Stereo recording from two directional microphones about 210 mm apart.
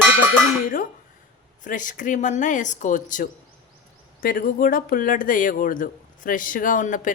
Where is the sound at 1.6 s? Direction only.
40° left (ahead or behind).